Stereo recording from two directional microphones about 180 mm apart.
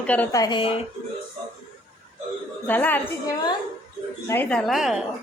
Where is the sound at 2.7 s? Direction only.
10° left (ahead or behind).